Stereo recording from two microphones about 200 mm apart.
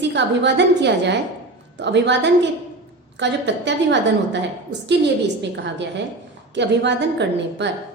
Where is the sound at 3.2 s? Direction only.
60° right (ahead or behind).